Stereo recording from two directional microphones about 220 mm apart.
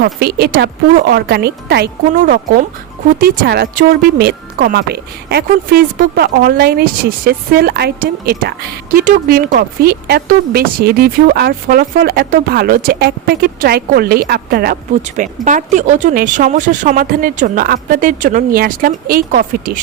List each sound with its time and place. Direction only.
0.0 s speech: 45° right (ahead or behind)